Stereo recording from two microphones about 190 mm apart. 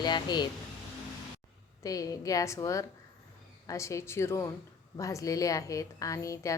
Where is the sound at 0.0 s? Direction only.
20° left (ahead or behind).